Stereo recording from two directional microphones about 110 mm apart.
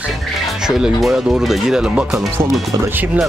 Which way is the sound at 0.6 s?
5° right (ahead or behind).